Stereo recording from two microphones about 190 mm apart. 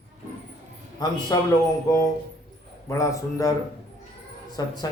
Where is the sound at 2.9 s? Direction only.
15° left (ahead or behind).